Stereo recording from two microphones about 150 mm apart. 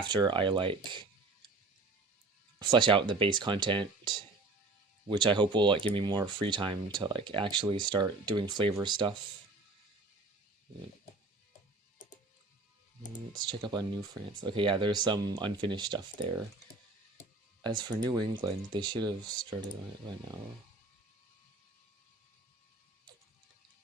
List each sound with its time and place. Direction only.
0.0 s speech: 30° right (ahead or behind)
2.6 s speech: 30° right (ahead or behind)
5.0 s speech: 30° right (ahead or behind)
13.4 s speech: 30° right (ahead or behind)
17.6 s speech: 30° right (ahead or behind)